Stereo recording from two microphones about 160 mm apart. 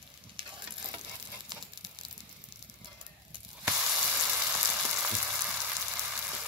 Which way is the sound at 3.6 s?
5° right (ahead or behind).